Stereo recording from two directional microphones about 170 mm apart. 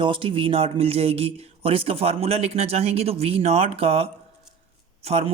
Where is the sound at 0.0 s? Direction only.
30° right (ahead or behind).